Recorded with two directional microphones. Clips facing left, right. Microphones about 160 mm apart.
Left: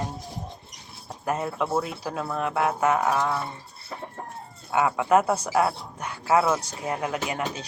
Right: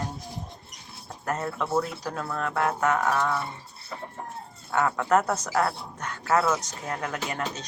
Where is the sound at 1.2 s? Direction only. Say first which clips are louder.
Left 3 dB; 10° left (ahead or behind).